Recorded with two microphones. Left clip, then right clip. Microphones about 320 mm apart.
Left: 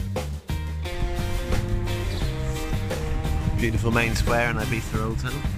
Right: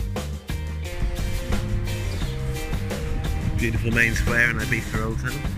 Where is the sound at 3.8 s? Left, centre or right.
Left.